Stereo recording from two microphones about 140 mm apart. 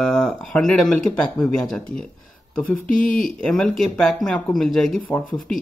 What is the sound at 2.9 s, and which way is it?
Speech, 75° left (ahead or behind).